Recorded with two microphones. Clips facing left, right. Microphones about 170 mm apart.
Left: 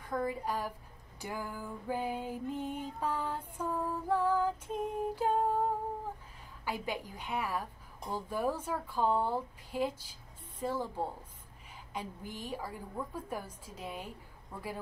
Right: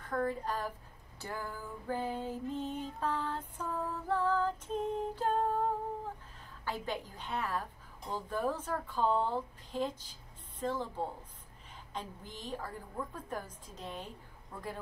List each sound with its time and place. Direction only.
0.0 s a woman's voice: 10° left (ahead or behind)
1.2 s music: 15° left (ahead or behind)
6.6 s music: 10° left (ahead or behind)